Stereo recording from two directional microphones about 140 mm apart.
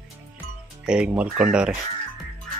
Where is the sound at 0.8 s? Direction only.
5° right (ahead or behind).